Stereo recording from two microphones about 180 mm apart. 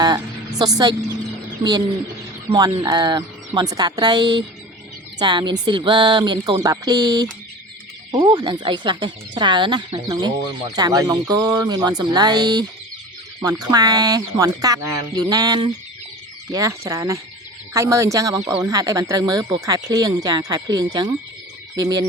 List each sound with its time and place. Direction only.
0.0 s speech: 20° right (ahead or behind)
2.5 s speech: 20° right (ahead or behind)